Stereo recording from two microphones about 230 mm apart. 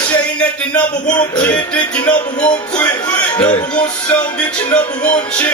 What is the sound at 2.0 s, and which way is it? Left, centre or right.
Speech, centre.